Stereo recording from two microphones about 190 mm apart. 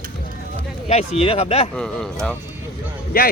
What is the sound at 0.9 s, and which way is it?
Speech, 35° left (ahead or behind).